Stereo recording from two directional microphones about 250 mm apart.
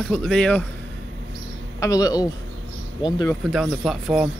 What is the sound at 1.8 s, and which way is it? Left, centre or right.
Speech, centre.